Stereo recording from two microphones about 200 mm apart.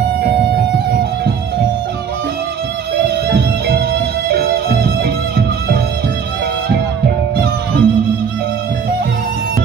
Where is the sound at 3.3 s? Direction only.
55° right (ahead or behind).